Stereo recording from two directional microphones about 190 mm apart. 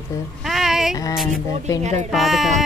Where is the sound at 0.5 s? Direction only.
Centre (ahead or behind).